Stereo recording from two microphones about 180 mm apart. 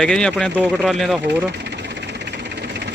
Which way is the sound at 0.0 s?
5° left (ahead or behind).